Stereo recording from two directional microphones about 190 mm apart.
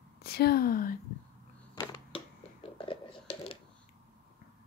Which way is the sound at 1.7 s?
25° left (ahead or behind).